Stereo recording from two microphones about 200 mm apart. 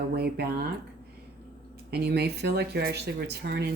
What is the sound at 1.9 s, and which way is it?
Speech, 55° right (ahead or behind).